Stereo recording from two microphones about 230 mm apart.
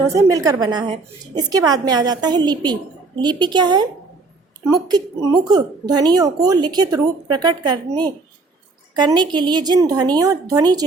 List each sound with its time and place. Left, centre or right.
0.0 s a woman's voice: centre
9.0 s a woman's voice: centre